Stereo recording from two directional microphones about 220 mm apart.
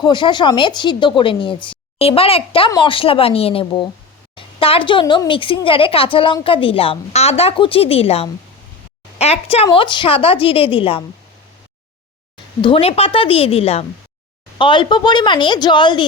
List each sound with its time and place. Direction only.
0.0 s a woman's voice: 20° left (ahead or behind)
12.6 s a woman's voice: 25° left (ahead or behind)